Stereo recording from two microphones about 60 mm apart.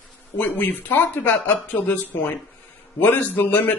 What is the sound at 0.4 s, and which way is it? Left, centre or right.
Speech, left.